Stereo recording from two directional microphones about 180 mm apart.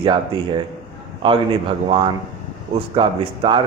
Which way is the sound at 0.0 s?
25° right (ahead or behind).